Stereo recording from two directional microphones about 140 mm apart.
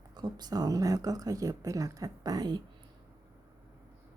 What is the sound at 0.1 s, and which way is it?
A woman's voice, 30° right (ahead or behind).